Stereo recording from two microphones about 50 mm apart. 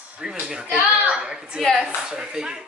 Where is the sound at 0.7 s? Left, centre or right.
Right.